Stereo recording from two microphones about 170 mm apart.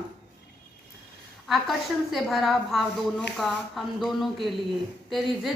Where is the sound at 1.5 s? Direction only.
Centre (ahead or behind).